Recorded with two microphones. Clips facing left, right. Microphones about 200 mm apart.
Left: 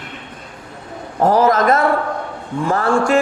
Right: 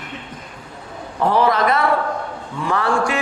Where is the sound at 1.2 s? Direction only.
45° left (ahead or behind).